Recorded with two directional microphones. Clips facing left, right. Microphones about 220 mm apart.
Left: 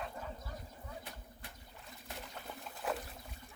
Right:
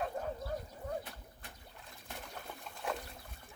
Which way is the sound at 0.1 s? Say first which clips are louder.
Right 7 dB; 50° right (ahead or behind).